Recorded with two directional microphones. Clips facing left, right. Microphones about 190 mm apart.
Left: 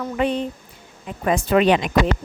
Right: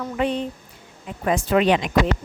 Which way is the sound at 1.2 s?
60° left (ahead or behind).